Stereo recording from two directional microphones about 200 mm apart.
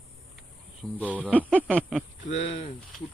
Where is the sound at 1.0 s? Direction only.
5° right (ahead or behind).